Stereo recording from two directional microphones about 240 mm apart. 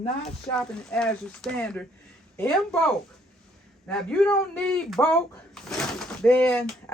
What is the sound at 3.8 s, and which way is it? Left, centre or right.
Speech, centre.